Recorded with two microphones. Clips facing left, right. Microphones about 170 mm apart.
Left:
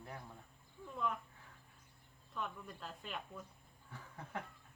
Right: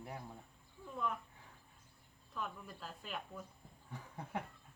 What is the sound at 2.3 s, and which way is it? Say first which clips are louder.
Speech: even; 5° right (ahead or behind).